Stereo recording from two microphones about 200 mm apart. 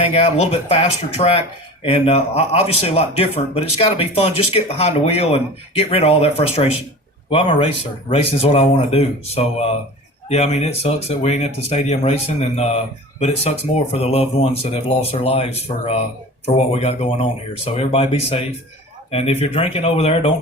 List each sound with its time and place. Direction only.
0.0 s a man's voice: 30° left (ahead or behind)